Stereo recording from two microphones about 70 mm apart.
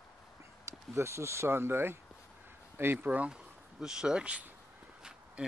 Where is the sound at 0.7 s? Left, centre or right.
Right.